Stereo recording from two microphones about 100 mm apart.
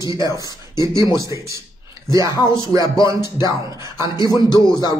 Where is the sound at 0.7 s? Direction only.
35° right (ahead or behind).